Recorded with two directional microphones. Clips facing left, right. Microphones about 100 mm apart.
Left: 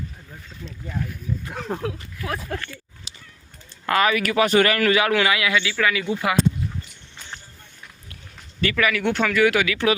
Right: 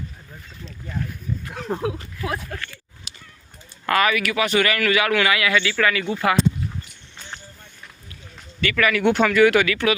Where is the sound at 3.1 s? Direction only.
25° left (ahead or behind).